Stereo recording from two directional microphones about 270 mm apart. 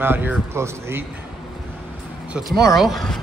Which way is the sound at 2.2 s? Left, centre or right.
Centre.